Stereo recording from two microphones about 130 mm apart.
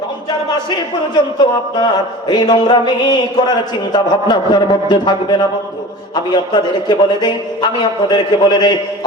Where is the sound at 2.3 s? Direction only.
35° left (ahead or behind).